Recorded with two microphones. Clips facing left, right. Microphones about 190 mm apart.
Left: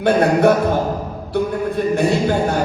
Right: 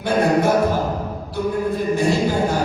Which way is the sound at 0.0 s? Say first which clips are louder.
Left 4 dB; 65° left (ahead or behind).